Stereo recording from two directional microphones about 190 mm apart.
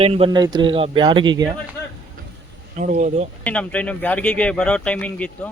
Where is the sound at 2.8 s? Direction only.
40° right (ahead or behind).